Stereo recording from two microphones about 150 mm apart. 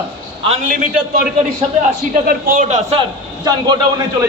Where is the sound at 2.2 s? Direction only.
75° right (ahead or behind); by 2.9 s 55° right (ahead or behind).